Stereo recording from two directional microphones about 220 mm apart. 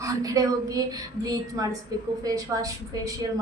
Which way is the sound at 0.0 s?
15° right (ahead or behind).